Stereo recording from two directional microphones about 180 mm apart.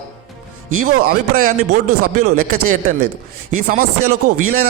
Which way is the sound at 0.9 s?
55° right (ahead or behind).